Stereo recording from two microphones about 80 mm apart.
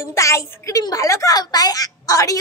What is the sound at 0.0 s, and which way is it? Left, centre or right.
A woman's voice, left.